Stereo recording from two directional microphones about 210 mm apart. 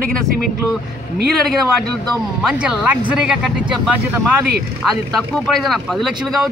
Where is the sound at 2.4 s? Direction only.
Centre (ahead or behind).